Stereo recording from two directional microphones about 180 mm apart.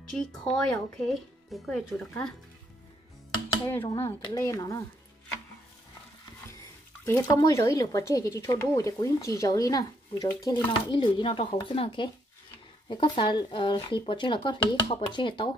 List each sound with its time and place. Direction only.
0.6 s speech: 5° left (ahead or behind)
3.6 s speech: 15° left (ahead or behind)
7.1 s speech: 15° left (ahead or behind)